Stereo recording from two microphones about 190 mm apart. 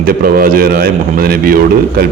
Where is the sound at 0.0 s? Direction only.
50° right (ahead or behind).